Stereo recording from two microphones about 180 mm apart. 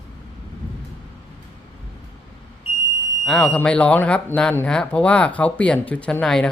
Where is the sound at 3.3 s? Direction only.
5° left (ahead or behind).